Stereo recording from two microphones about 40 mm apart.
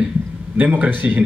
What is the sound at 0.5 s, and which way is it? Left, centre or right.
Speech, right.